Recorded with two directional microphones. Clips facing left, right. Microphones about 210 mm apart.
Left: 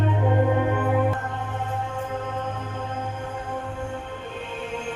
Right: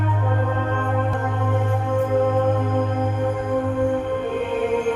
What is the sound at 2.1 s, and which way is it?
Music, 55° right (ahead or behind).